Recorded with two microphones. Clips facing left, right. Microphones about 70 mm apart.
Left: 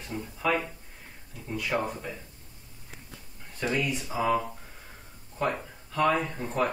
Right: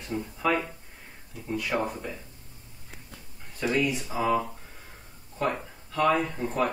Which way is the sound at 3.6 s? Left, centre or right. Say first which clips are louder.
Right 3 dB; centre.